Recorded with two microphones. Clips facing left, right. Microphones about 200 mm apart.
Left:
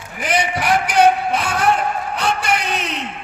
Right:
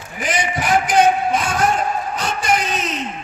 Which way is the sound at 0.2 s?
60° left (ahead or behind).